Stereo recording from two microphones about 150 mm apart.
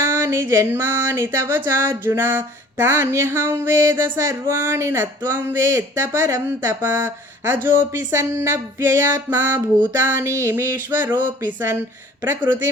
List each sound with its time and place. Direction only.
0.0 s music: 20° right (ahead or behind)